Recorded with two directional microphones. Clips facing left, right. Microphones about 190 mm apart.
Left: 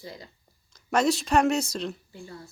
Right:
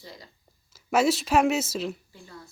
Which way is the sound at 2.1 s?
25° left (ahead or behind).